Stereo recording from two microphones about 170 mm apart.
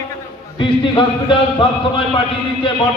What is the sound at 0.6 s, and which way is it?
A man's voice, 30° left (ahead or behind).